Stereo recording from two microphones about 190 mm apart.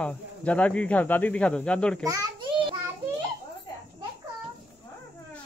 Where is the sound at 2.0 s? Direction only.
20° right (ahead or behind).